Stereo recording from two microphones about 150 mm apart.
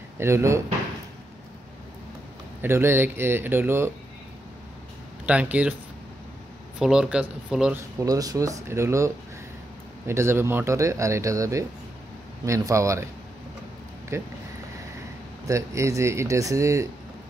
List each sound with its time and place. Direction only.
0.2 s speech: 15° right (ahead or behind)
2.6 s speech: 15° right (ahead or behind)
5.2 s speech: 10° right (ahead or behind)
6.8 s speech: 5° right (ahead or behind)
8.0 s speech: 25° right (ahead or behind)
14.1 s speech: 20° right (ahead or behind)
15.4 s speech: 20° right (ahead or behind)